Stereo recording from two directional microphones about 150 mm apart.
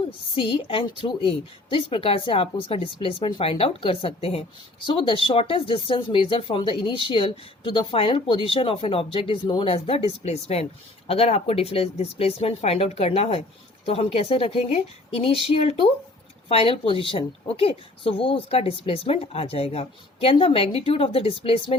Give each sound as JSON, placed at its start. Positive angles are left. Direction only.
{"t": 0.0, "sound": "speech", "side_deg": 35}